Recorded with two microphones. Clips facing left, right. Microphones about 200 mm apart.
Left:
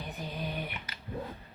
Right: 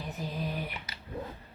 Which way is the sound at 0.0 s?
Centre (ahead or behind).